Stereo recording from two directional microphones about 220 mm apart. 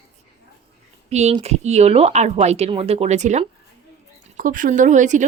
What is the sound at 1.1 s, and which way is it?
Speech, 30° right (ahead or behind).